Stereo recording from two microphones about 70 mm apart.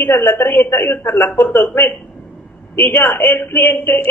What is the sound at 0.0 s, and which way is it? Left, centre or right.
A man's voice, left.